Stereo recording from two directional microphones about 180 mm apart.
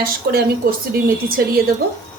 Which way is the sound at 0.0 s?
55° right (ahead or behind).